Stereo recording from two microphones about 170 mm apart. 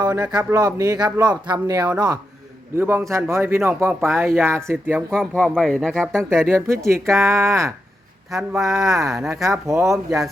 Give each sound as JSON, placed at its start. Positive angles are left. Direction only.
{"t": 0.0, "sound": "speech", "side_deg": -20}
{"t": 5.1, "sound": "speech", "side_deg": 5}
{"t": 6.5, "sound": "speech", "side_deg": -15}